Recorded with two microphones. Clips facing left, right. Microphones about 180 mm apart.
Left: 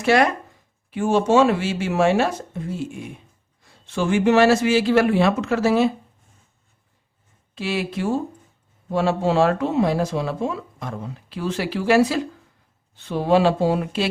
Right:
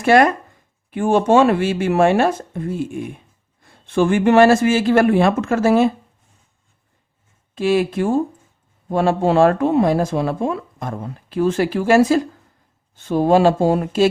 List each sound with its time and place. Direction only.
0.0 s speech: 50° right (ahead or behind)
7.5 s speech: 50° right (ahead or behind)